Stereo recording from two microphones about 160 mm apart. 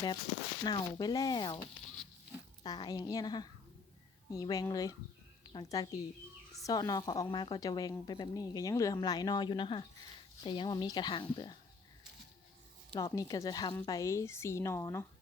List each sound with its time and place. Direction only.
0.6 s a woman's voice: 25° left (ahead or behind)
2.6 s a woman's voice: 25° left (ahead or behind)
13.0 s a woman's voice: 25° left (ahead or behind)